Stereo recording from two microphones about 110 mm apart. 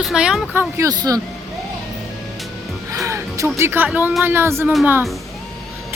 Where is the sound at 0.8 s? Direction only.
35° right (ahead or behind).